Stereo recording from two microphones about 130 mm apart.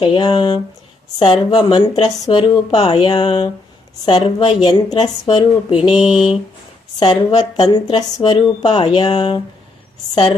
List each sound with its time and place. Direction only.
0.0 s speech: 40° left (ahead or behind)
7.0 s speech: 40° left (ahead or behind)